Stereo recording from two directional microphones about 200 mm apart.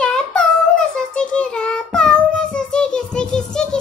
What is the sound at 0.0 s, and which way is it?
Child singing, 5° left (ahead or behind).